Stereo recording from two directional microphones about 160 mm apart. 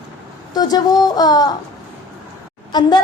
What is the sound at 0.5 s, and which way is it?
A woman's voice, 25° left (ahead or behind).